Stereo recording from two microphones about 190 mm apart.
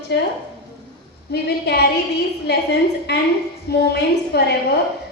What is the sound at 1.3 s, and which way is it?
A woman's voice, 60° left (ahead or behind).